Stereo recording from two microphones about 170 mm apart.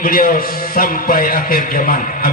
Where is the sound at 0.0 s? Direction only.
55° left (ahead or behind).